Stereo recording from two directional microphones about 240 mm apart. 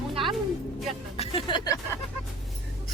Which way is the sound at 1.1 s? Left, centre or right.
Left.